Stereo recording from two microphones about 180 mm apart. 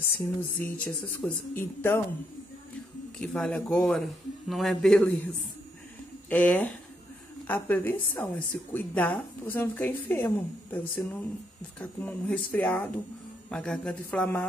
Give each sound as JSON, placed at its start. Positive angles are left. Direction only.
{"t": 0.2, "sound": "speech", "side_deg": 10}
{"t": 3.2, "sound": "a man's voice", "side_deg": 0}